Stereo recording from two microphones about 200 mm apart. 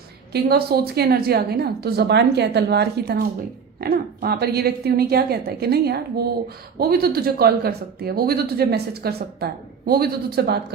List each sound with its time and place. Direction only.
0.3 s speech: 50° right (ahead or behind)